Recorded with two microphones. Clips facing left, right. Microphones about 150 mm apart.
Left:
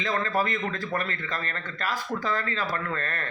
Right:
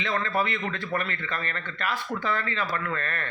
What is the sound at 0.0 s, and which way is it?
A man's voice, 40° left (ahead or behind).